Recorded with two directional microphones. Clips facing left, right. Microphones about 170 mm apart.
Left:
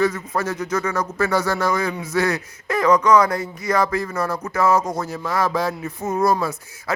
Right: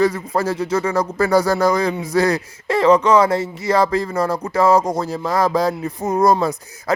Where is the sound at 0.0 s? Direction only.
35° right (ahead or behind).